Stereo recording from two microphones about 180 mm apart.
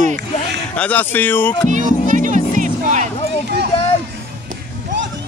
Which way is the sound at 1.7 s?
45° right (ahead or behind).